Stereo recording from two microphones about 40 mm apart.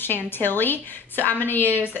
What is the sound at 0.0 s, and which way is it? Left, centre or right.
A woman's voice, left.